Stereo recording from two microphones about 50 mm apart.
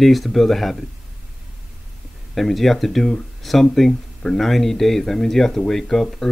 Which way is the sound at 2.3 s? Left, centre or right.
Centre.